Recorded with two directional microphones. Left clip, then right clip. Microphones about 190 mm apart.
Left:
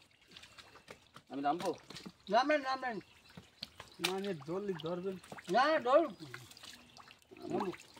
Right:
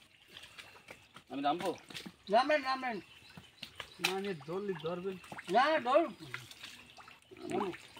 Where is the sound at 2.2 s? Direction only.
5° left (ahead or behind).